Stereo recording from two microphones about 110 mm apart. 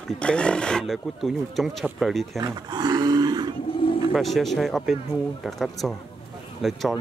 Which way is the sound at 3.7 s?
55° left (ahead or behind).